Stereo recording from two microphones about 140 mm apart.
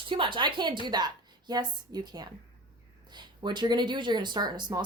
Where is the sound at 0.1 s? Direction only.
35° right (ahead or behind).